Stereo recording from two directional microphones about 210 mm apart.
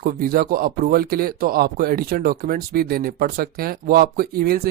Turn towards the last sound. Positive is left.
turn(degrees=-45)  # may be behind; listen again after turning